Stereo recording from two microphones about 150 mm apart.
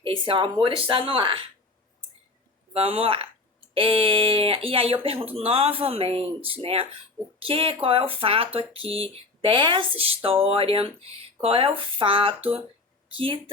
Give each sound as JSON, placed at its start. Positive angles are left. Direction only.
{"t": 0.0, "sound": "speech", "side_deg": -35}
{"t": 2.7, "sound": "speech", "side_deg": -40}